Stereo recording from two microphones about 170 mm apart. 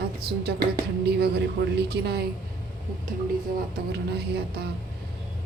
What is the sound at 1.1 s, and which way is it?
Speech, 70° right (ahead or behind).